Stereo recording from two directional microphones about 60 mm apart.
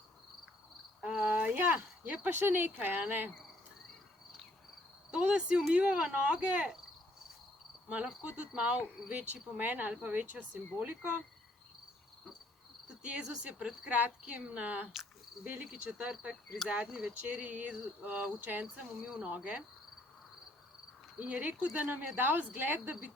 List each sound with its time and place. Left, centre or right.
1.0 s speech: centre
1.4 s speech: right
5.1 s speech: centre
8.3 s speech: centre
13.0 s speech: centre
18.6 s speech: centre
21.2 s speech: right